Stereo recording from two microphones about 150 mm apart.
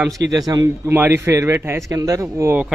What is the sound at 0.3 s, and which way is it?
A man's voice, 25° right (ahead or behind).